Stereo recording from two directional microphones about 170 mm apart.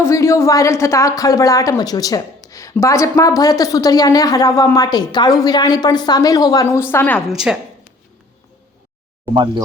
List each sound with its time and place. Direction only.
0.0 s a woman's voice: 15° left (ahead or behind)
7.3 s speech: 5° right (ahead or behind)